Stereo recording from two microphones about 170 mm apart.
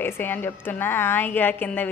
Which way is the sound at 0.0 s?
10° left (ahead or behind).